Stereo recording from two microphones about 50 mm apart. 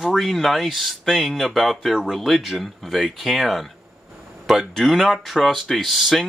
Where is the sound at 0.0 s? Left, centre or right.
Centre.